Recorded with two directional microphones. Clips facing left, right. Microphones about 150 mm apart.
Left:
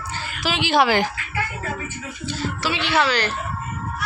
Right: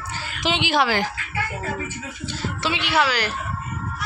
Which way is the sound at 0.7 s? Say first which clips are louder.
Left 5 dB; 15° left (ahead or behind).